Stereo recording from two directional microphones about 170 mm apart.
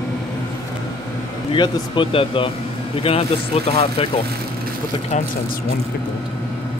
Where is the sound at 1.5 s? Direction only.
30° left (ahead or behind).